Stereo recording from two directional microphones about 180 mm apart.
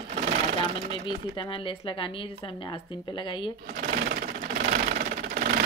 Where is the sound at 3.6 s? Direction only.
45° right (ahead or behind).